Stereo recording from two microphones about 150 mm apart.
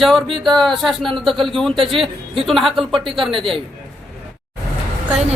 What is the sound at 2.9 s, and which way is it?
Speech, 35° right (ahead or behind).